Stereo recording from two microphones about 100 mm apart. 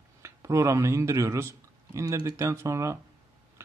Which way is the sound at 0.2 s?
30° right (ahead or behind).